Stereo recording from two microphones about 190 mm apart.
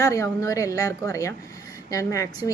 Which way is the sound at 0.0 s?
15° left (ahead or behind).